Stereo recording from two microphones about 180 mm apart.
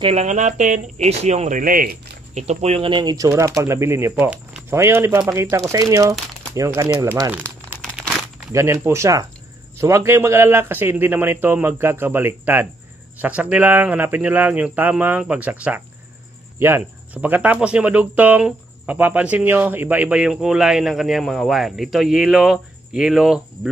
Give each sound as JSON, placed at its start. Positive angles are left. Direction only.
{"t": 0.0, "sound": "speech", "side_deg": -35}
{"t": 2.4, "sound": "speech", "side_deg": -35}
{"t": 7.8, "sound": "crumpling", "side_deg": -5}
{"t": 8.5, "sound": "speech", "side_deg": -15}